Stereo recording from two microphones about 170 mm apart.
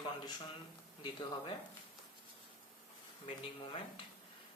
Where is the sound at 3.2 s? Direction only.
35° left (ahead or behind).